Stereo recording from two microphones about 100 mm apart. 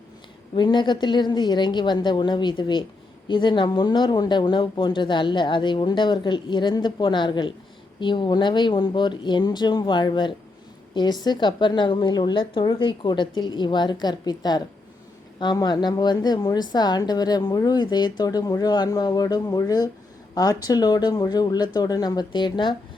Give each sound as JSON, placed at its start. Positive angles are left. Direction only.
{"t": 0.5, "sound": "a woman's voice", "side_deg": 50}